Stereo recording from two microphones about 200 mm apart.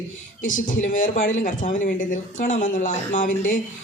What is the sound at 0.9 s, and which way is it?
Speech, 40° left (ahead or behind).